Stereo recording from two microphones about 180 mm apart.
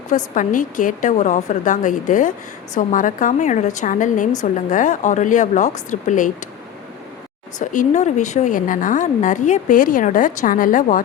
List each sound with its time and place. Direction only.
0.3 s a woman's voice: 45° left (ahead or behind)
7.6 s a woman's voice: 45° left (ahead or behind)